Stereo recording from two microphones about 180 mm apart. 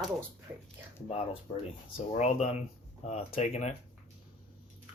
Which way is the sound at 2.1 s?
40° left (ahead or behind).